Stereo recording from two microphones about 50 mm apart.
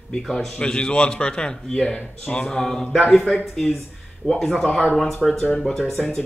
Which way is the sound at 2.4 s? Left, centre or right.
Centre.